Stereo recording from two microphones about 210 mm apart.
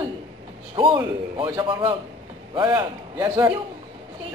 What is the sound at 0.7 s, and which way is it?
A man's voice, 25° right (ahead or behind).